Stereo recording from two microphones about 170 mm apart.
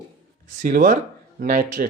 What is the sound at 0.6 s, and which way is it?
Speech, 50° right (ahead or behind).